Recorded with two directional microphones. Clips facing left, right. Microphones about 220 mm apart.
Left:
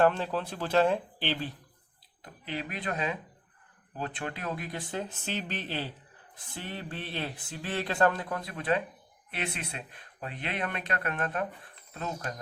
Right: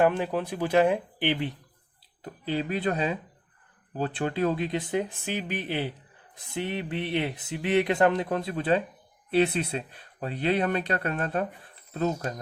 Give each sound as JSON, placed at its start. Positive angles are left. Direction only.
{"t": 0.0, "sound": "speech", "side_deg": -15}
{"t": 2.2, "sound": "speech", "side_deg": -30}